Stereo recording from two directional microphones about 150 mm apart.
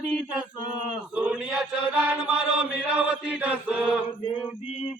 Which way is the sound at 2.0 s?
5° right (ahead or behind).